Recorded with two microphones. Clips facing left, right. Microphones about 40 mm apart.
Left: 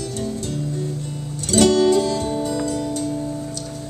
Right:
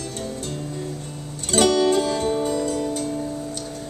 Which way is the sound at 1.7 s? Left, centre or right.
Right.